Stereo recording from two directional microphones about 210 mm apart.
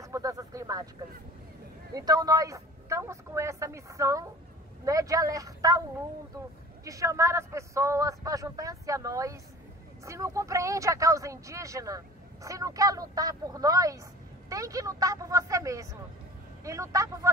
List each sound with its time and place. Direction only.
0.0 s a sound: 15° right (ahead or behind)
2.0 s speech: 15° right (ahead or behind)
6.8 s speech: 15° right (ahead or behind)